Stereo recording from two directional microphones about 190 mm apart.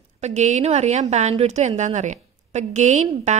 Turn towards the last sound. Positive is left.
turn(degrees=-40)  # may be behind; listen again after turning